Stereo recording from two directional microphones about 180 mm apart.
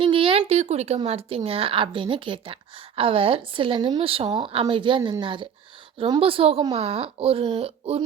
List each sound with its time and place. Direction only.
0.0 s speech: 30° right (ahead or behind)